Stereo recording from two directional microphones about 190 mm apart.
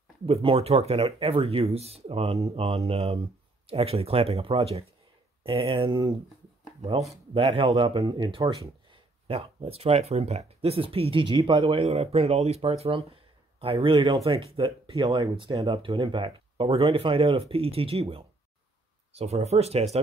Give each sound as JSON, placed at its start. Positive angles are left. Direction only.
{"t": 0.3, "sound": "a man's voice", "side_deg": -30}
{"t": 7.3, "sound": "a man's voice", "side_deg": -30}